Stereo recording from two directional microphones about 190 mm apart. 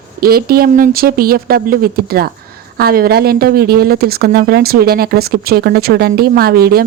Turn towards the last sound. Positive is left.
turn(degrees=-55)  # may be behind; listen again after turning